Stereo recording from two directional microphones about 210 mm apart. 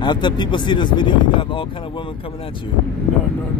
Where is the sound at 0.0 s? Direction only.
20° left (ahead or behind).